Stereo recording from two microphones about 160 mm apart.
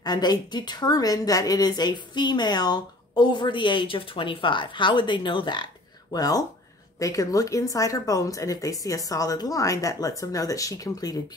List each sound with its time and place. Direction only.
0.0 s a woman's voice: 25° left (ahead or behind)